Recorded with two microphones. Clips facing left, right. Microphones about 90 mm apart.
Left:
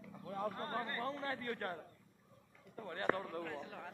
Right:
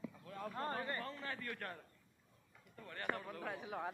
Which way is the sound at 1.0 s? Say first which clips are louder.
Left 5 dB; 35° left (ahead or behind).